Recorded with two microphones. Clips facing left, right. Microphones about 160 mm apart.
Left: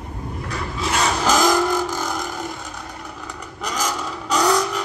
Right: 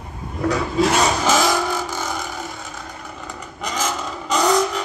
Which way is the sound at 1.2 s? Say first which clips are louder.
Left 1 dB; 5° right (ahead or behind).